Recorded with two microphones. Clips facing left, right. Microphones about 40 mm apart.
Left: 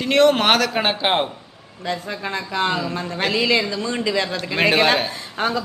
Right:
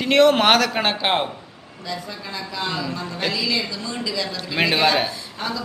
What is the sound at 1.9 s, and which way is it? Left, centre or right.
A man's voice, left.